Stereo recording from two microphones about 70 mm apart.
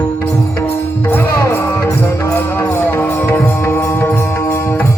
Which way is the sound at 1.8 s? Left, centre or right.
Left.